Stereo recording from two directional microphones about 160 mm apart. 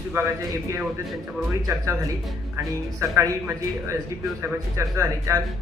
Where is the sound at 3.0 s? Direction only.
15° right (ahead or behind).